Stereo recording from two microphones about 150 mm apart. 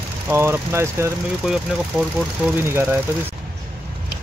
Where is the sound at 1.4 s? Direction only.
5° right (ahead or behind).